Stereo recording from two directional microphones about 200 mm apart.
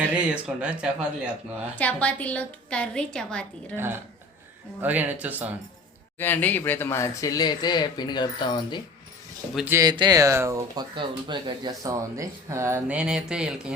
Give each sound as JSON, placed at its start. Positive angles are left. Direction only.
{"t": 0.0, "sound": "a woman's voice", "side_deg": -5}
{"t": 1.8, "sound": "a woman's voice", "side_deg": 5}
{"t": 3.8, "sound": "speech", "side_deg": -10}
{"t": 6.1, "sound": "speech", "side_deg": 10}
{"t": 9.6, "sound": "speech", "side_deg": -10}